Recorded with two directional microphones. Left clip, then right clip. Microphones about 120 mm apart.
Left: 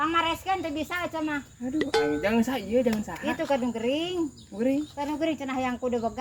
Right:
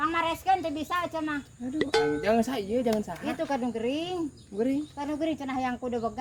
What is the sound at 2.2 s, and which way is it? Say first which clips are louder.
Speech: even; 35° right (ahead or behind).